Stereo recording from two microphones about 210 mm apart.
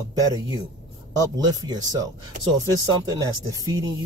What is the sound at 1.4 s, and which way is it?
Speech, 20° right (ahead or behind).